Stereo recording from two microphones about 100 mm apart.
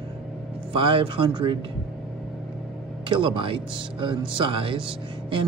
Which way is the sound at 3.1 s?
55° right (ahead or behind).